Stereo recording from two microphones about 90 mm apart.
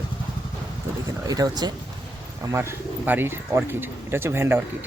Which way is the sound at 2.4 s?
30° right (ahead or behind).